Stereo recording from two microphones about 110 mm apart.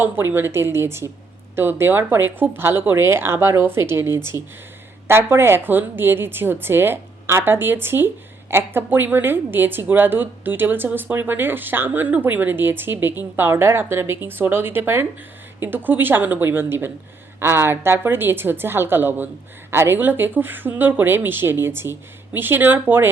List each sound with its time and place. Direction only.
0.0 s a woman's voice: 20° right (ahead or behind)